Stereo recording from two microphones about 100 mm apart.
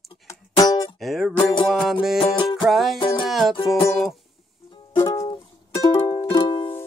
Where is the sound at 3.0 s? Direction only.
55° left (ahead or behind).